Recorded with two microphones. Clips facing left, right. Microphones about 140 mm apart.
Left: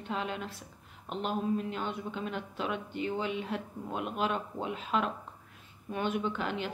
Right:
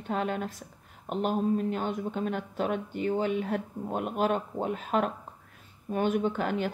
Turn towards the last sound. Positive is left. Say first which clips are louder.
# right 5 dB
turn(degrees=-45)  # may be behind; listen again after turning